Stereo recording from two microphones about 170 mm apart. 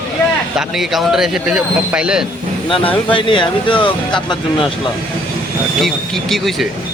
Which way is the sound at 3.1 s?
30° left (ahead or behind).